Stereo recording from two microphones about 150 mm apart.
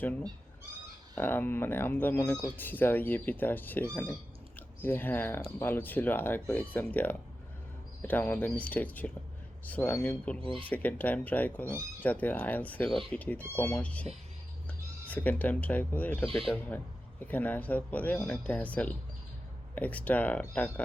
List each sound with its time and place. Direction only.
0.0 s speech: 10° left (ahead or behind)